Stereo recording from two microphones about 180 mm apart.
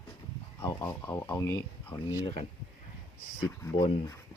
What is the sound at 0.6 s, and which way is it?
Speech, 15° left (ahead or behind).